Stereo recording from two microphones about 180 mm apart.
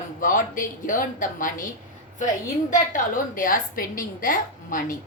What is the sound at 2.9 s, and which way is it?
A woman's voice, 50° left (ahead or behind).